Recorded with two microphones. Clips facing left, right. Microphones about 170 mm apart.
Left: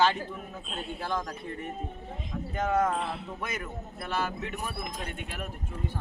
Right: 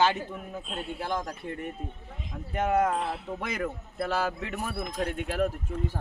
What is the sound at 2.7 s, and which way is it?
Speech, 10° right (ahead or behind).